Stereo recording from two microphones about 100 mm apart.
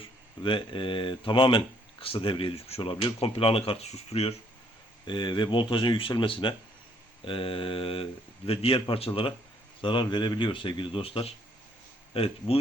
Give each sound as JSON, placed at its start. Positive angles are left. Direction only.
{"t": 0.0, "sound": "speech", "side_deg": 60}
{"t": 5.0, "sound": "a man's voice", "side_deg": 55}
{"t": 9.8, "sound": "a man's voice", "side_deg": 50}